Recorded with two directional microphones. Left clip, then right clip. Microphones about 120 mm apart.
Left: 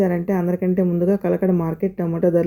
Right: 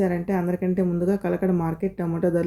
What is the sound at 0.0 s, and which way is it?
A woman's voice, 40° left (ahead or behind).